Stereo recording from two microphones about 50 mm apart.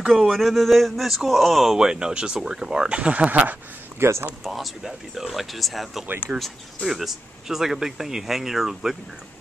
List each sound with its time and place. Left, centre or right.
0.0 s a sound: centre
0.3 s a man's voice: centre; by 3.3 s right
3.3 s speech: right
4.0 s speech: right
4.5 s a man's voice: centre